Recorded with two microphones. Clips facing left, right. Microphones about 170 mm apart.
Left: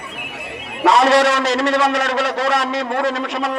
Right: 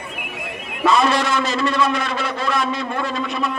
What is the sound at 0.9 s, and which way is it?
A man's voice, 80° left.